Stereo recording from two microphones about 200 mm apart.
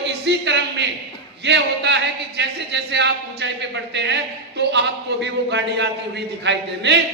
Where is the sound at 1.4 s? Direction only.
60° right (ahead or behind).